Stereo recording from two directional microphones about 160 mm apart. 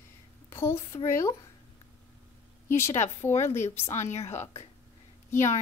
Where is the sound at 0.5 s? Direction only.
15° left (ahead or behind).